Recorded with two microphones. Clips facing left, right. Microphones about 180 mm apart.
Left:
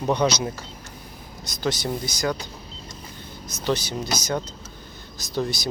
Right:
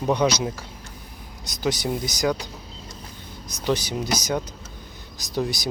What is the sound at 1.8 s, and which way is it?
Speech, 15° right (ahead or behind).